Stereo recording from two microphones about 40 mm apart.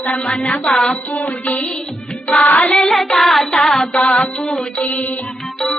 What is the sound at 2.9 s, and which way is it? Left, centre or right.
Child singing, centre.